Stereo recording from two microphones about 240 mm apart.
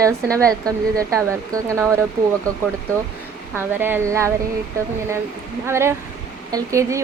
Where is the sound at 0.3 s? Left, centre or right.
Centre.